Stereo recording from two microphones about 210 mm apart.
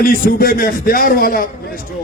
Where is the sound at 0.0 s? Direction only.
40° left (ahead or behind).